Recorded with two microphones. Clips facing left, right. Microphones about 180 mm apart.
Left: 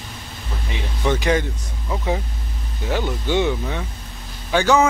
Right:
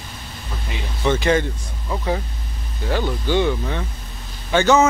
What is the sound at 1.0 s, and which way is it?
Speech, 10° left (ahead or behind).